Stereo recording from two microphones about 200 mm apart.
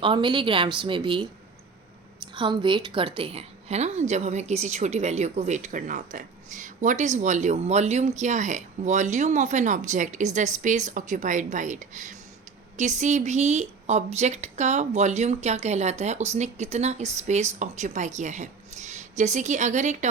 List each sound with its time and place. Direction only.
0.0 s a woman's voice: 25° right (ahead or behind)
2.3 s a woman's voice: 25° right (ahead or behind)